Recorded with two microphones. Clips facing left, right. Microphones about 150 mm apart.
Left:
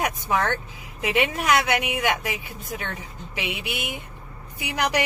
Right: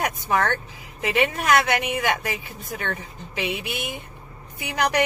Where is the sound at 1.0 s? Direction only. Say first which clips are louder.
Right 1 dB; 15° left (ahead or behind).